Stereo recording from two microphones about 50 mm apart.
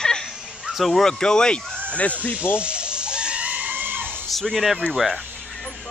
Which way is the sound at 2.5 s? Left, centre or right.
Right.